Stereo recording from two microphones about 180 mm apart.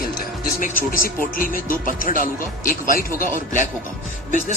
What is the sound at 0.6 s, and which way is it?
Speech, 50° left (ahead or behind).